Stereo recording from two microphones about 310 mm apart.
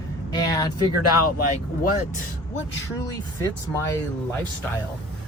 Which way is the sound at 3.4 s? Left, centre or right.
Centre.